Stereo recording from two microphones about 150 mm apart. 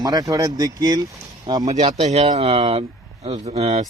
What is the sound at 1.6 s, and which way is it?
Speech, 50° right (ahead or behind).